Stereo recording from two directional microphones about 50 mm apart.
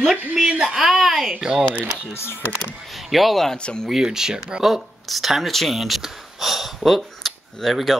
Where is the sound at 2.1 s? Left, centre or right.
Left.